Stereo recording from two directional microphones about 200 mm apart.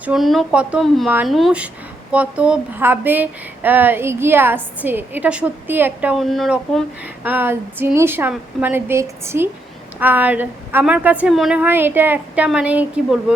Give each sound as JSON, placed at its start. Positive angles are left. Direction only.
{"t": 0.0, "sound": "speech", "side_deg": 0}
{"t": 7.3, "sound": "speech", "side_deg": -10}